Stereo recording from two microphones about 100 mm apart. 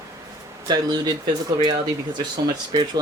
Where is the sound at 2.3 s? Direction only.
45° right (ahead or behind).